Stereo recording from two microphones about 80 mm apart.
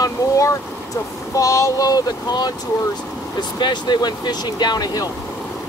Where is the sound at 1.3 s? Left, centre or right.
Left.